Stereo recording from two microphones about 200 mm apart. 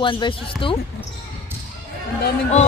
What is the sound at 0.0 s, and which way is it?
Speech, 25° left (ahead or behind).